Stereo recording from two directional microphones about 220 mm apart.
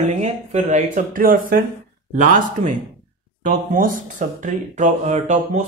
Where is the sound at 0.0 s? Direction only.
30° right (ahead or behind).